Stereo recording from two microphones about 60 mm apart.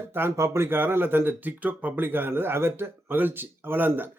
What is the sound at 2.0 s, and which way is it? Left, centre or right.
Speech, right.